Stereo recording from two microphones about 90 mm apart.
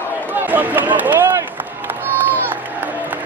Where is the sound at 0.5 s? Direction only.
20° right (ahead or behind).